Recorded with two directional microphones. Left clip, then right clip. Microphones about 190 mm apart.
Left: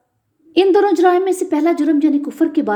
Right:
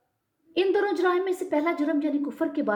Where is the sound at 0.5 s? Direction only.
55° left (ahead or behind).